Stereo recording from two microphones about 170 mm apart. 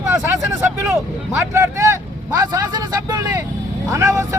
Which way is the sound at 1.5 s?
15° right (ahead or behind).